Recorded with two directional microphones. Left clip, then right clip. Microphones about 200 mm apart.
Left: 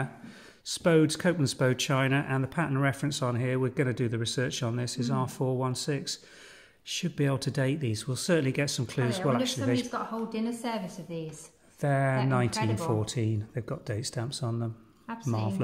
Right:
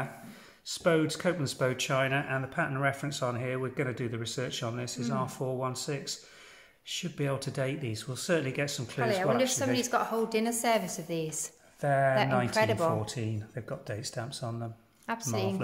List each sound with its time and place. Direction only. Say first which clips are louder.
0.7 s speech: left 3 dB; 50° left (ahead or behind)
9.8 s a woman's voice: right 4 dB; 50° right (ahead or behind)
11.8 s speech: right 3 dB; 45° left (ahead or behind)
15.1 s a woman's voice: right 5 dB; 50° right (ahead or behind)